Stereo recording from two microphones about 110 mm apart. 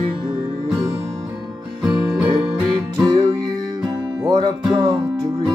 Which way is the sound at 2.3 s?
40° right (ahead or behind).